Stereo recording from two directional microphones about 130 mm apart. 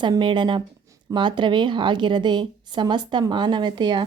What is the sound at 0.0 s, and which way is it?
Speech, 35° right (ahead or behind).